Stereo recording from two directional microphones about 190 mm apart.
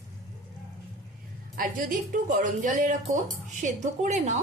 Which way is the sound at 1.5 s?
45° right (ahead or behind).